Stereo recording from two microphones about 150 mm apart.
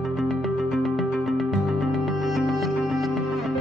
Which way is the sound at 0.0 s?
Centre (ahead or behind).